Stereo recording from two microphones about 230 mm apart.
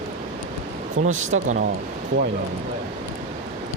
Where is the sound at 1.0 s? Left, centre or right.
Right.